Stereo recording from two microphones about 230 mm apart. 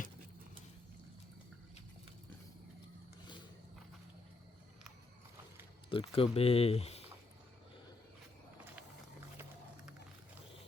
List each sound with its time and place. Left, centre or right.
5.9 s speech: left